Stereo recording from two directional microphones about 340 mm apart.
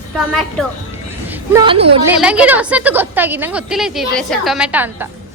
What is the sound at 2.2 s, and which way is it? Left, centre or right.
A woman's voice, centre.